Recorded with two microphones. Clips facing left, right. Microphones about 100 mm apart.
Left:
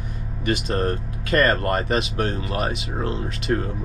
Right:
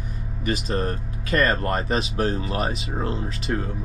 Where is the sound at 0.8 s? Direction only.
40° left (ahead or behind).